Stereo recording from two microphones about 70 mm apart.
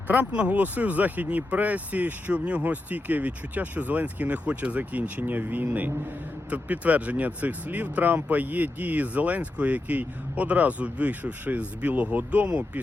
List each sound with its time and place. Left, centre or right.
0.3 s speech: centre